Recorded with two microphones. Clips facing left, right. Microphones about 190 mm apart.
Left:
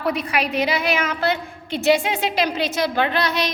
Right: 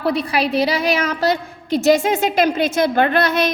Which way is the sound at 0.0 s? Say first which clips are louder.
Right 4 dB; 35° right (ahead or behind).